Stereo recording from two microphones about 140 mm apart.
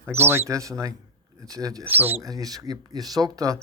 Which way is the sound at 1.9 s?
15° right (ahead or behind).